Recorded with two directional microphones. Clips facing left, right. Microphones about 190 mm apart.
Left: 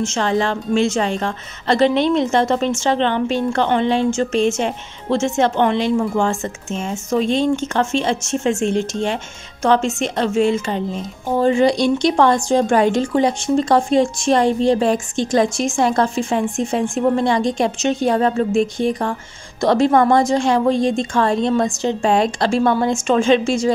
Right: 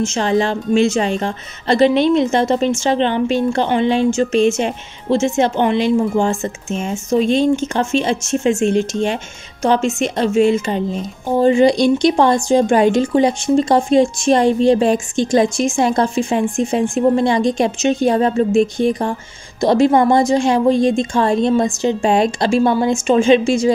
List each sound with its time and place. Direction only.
0.0 s a woman's voice: 15° right (ahead or behind)